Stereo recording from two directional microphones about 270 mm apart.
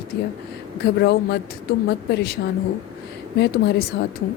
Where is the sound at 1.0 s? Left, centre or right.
Left.